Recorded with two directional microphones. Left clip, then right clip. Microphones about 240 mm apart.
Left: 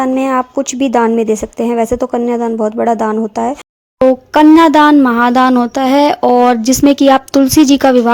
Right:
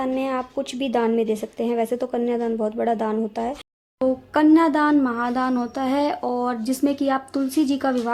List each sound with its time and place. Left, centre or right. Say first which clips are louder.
0.0 s speech: left 11 dB; left
4.0 s speech: left 12 dB; left